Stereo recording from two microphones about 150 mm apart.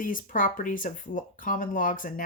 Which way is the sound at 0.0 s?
65° left (ahead or behind).